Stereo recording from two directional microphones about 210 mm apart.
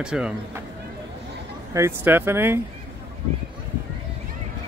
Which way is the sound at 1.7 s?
10° right (ahead or behind).